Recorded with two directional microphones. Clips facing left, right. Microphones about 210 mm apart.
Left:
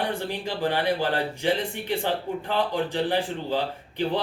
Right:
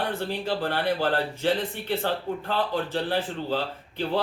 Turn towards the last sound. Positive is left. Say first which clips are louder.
# left 1 dB
turn(degrees=15)  # may be behind; listen again after turning